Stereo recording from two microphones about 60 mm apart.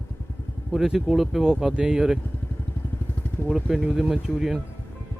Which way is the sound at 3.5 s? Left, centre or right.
Centre.